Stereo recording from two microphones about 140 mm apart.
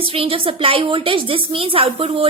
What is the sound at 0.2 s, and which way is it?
A child's voice, 40° right (ahead or behind).